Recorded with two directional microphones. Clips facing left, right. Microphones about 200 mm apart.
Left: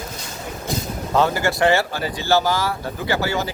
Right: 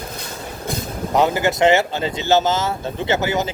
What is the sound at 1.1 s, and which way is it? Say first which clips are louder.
Speech: right 2 dB; 20° right (ahead or behind).